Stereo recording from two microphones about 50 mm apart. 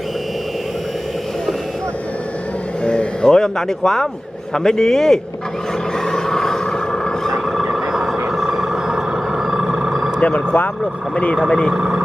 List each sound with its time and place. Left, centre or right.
2.8 s a man's voice: centre
6.1 s vehicle: centre
10.2 s speech: left
11.4 s a man's voice: centre
11.7 s speech: centre